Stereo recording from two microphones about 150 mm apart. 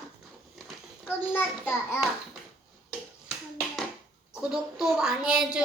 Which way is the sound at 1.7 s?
15° left (ahead or behind).